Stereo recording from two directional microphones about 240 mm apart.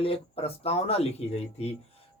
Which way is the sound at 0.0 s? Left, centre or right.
Left.